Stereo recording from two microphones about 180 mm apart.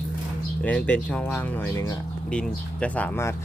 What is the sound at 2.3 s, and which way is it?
Speech, 5° left (ahead or behind).